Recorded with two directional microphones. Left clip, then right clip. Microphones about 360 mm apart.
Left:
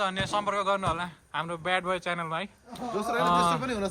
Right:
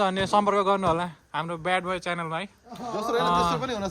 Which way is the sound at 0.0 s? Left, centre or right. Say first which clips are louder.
Right 6 dB; centre.